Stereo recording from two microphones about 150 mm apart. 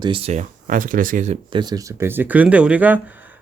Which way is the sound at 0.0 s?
35° right (ahead or behind).